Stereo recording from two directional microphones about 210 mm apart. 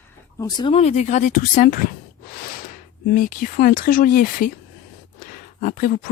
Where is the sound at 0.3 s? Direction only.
20° left (ahead or behind); by 1.9 s 40° left (ahead or behind).